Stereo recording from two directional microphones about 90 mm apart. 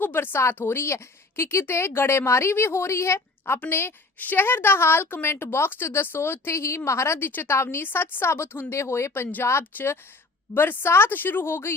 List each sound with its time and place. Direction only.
0.0 s a woman's voice: 20° left (ahead or behind)